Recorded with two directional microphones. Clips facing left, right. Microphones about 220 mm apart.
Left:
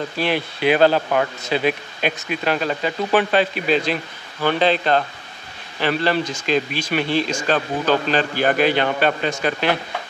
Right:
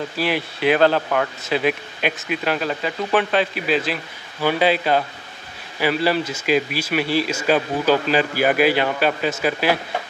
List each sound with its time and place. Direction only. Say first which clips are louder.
0.2 s speech: left 1 dB; centre (ahead or behind)